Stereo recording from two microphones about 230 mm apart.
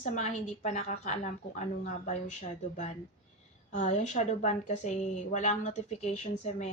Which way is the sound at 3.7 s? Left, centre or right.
Left.